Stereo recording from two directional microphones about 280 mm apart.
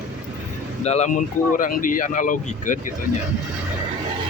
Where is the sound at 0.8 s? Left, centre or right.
Left.